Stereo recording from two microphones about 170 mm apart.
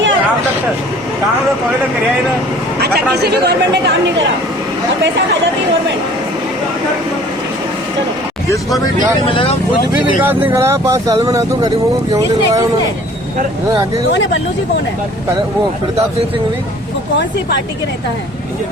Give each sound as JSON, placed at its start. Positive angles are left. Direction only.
{"t": 2.8, "sound": "speech", "side_deg": -70}
{"t": 9.3, "sound": "speech", "side_deg": 30}
{"t": 10.2, "sound": "speech", "side_deg": -15}